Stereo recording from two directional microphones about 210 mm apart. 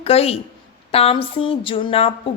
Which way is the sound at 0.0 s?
30° left (ahead or behind).